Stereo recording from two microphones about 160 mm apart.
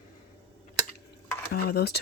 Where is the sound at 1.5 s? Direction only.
75° left (ahead or behind).